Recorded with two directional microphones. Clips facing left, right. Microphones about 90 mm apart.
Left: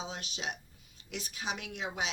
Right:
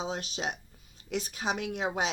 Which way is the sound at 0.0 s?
40° right (ahead or behind).